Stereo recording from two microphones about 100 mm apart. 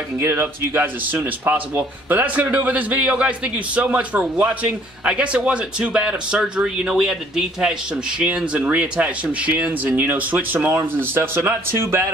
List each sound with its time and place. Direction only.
0.2 s a man's voice: 25° right (ahead or behind)